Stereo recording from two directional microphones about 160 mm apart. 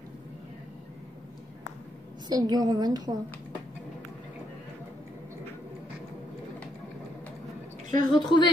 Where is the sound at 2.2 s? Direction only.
25° right (ahead or behind).